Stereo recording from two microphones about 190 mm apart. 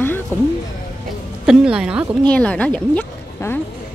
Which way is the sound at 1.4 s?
5° right (ahead or behind).